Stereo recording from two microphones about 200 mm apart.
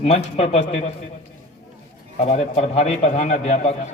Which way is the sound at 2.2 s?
35° left (ahead or behind).